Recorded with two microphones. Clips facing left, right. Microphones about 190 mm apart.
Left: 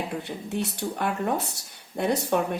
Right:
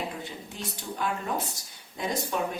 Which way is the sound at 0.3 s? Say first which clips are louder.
Left 9 dB; 65° left (ahead or behind).